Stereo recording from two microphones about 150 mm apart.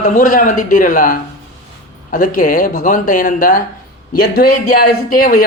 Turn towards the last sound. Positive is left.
turn(degrees=75)  # may be behind; listen again after turning